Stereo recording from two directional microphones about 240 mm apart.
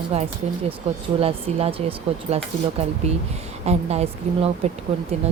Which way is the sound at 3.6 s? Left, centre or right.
Right.